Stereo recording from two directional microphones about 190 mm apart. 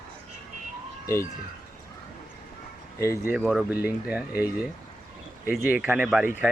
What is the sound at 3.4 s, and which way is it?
Speech, centre (ahead or behind).